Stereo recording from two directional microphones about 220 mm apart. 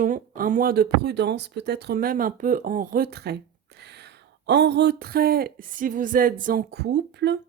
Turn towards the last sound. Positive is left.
turn(degrees=-50)  # may be behind; listen again after turning